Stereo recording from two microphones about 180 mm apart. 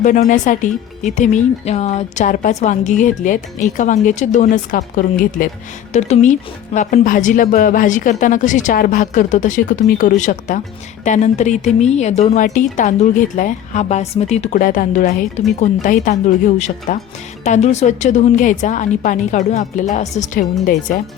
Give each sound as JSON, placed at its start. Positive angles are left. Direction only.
{"t": 0.0, "sound": "speech", "side_deg": 45}
{"t": 5.9, "sound": "a woman's voice", "side_deg": 40}